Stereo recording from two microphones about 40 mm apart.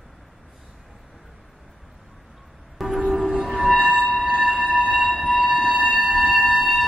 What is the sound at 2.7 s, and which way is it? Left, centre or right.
Music, centre.